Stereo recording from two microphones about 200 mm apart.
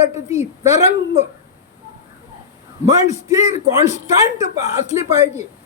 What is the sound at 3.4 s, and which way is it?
Speech, 35° left (ahead or behind).